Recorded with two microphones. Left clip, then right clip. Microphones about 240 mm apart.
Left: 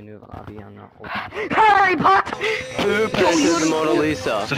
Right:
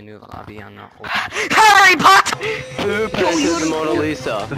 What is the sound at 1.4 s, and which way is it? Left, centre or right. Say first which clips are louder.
Speech: right 4 dB; right.